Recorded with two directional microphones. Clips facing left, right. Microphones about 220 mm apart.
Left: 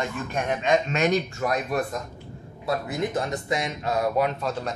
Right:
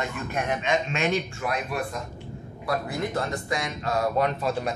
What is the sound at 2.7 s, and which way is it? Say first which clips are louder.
Speech: left 2 dB; 20° left (ahead or behind).